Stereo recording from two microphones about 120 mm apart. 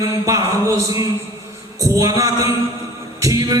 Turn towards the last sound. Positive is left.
turn(degrees=-30)  # may be behind; listen again after turning